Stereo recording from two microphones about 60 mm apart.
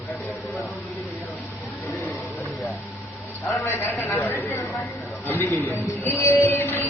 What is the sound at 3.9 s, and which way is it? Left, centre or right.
Chatter, left.